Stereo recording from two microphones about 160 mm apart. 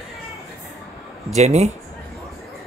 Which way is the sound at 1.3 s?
45° right (ahead or behind).